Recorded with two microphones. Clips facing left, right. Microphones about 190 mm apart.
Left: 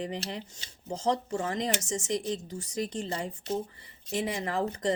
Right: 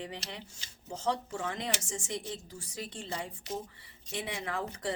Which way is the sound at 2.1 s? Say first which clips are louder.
Left 8 dB; 90° left.